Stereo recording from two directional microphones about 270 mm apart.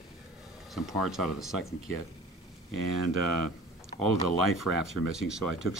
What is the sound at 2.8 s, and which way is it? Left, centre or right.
Speech, right.